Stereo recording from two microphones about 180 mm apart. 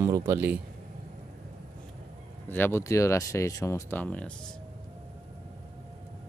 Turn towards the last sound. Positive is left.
turn(degrees=5)  # may be behind; listen again after turning